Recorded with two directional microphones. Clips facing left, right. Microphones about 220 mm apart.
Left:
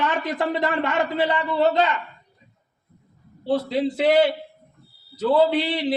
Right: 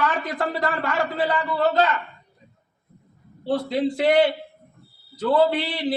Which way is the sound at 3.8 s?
5° left (ahead or behind).